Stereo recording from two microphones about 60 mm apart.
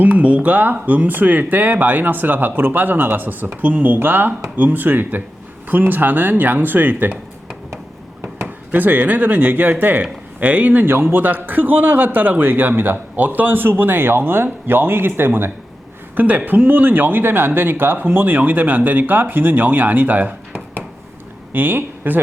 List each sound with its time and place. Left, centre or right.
0.0 s speech: right
8.7 s speech: right